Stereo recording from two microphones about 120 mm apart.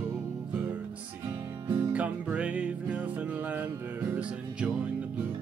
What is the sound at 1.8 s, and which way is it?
Music, 10° right (ahead or behind).